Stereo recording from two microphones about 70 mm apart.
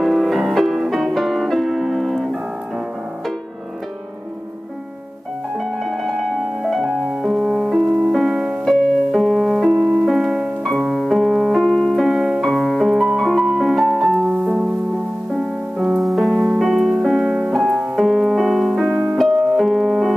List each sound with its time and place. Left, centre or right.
0.0 s music: centre
5.6 s music: centre
10.8 s piano: centre
12.1 s piano: centre
12.4 s piano: centre
12.8 s music: centre
14.2 s music: centre
16.0 s music: centre